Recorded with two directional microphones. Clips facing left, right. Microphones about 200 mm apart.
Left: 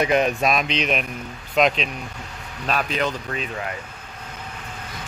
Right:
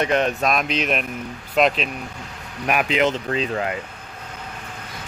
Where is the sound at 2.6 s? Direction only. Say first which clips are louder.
Right 4 dB; 15° right (ahead or behind).